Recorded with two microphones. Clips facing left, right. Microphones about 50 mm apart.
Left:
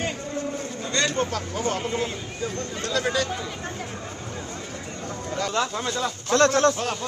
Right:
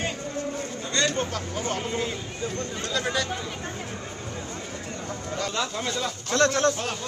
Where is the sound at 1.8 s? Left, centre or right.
Left.